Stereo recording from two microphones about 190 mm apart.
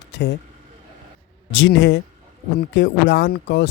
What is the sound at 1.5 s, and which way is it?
Speech, 75° left (ahead or behind).